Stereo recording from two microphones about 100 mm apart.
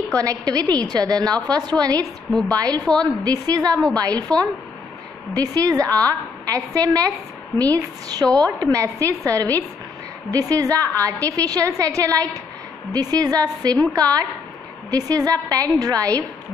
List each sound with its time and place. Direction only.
0.2 s a woman's voice: 40° right (ahead or behind)